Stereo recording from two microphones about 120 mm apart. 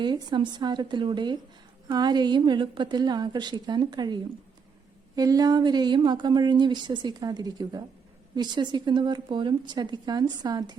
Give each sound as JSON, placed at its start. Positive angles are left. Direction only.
{"t": 0.0, "sound": "speech", "side_deg": -40}